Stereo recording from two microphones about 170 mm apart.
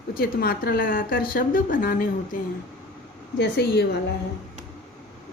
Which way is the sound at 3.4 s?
70° left (ahead or behind).